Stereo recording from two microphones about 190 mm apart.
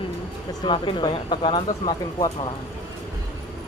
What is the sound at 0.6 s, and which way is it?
Speech, 25° left (ahead or behind).